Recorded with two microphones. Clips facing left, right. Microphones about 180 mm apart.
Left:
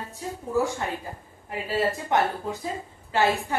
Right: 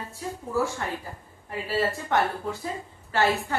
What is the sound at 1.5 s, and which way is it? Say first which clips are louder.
A woman's voice: left 1 dB; 15° left (ahead or behind).